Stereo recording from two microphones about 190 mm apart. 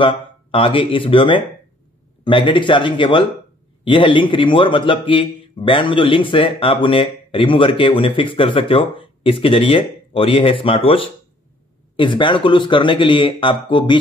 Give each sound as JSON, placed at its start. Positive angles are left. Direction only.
{"t": 0.0, "sound": "a man's voice", "side_deg": 25}